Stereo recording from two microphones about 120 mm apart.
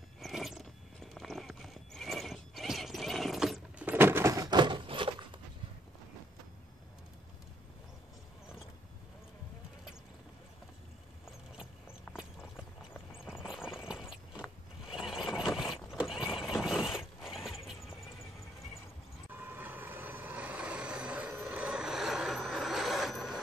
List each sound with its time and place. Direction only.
0.2 s a sound: centre (ahead or behind)
1.1 s horse: centre (ahead or behind)
3.8 s a sound: 15° right (ahead or behind); by 5.4 s 45° right (ahead or behind)
13.2 s clip-clop: 5° right (ahead or behind)
15.0 s vehicle: 5° right (ahead or behind)
15.9 s neigh: 5° right (ahead or behind)
19.3 s vehicle: 15° right (ahead or behind)